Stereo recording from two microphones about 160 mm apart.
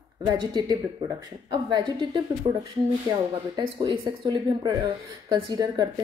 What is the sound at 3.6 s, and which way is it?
Speech, 30° right (ahead or behind).